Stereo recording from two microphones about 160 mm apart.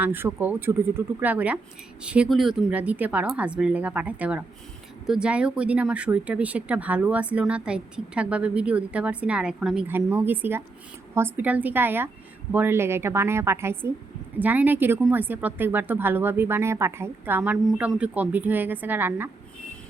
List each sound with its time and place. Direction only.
0.0 s speech: 15° right (ahead or behind)